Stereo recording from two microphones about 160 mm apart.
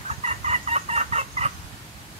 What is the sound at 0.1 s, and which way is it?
Fowl, 45° right (ahead or behind).